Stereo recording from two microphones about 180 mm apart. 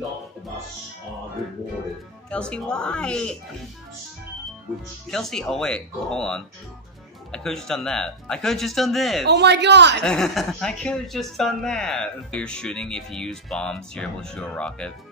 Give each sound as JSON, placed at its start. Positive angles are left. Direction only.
{"t": 2.3, "sound": "speech", "side_deg": 5}
{"t": 5.1, "sound": "speech", "side_deg": 0}
{"t": 9.3, "sound": "speech", "side_deg": -70}
{"t": 10.0, "sound": "speech", "side_deg": 5}